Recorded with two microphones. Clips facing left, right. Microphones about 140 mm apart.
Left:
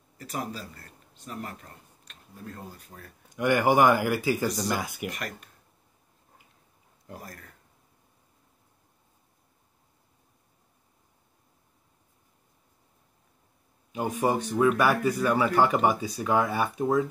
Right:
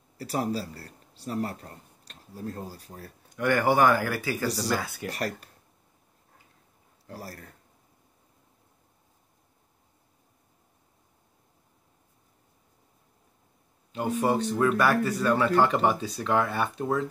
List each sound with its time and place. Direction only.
0.2 s speech: 35° right (ahead or behind)
3.3 s speech: 15° left (ahead or behind)
5.1 s speech: 35° right (ahead or behind)
7.2 s speech: 35° right (ahead or behind)
13.9 s speech: 15° left (ahead or behind)